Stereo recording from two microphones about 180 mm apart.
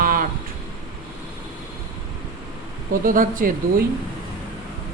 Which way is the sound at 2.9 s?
50° right (ahead or behind).